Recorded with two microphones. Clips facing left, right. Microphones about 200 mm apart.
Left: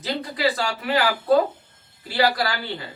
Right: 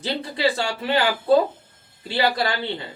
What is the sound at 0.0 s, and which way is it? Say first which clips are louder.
Speech: right 1 dB; 30° right (ahead or behind).